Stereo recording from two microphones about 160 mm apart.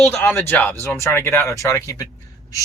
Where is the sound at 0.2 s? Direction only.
15° left (ahead or behind).